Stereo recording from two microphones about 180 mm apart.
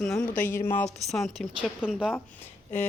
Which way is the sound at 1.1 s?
Centre (ahead or behind).